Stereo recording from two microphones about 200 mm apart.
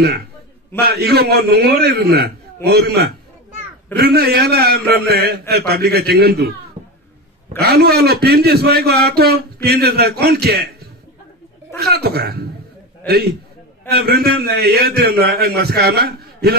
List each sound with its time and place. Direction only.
0.7 s a man's voice: 50° right (ahead or behind)
7.6 s a man's voice: 50° right (ahead or behind)
13.8 s a man's voice: 55° right (ahead or behind)